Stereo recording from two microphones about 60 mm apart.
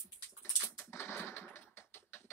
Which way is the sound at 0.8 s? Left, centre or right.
Left.